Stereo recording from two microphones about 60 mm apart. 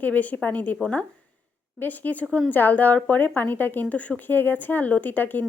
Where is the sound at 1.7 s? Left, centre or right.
Left.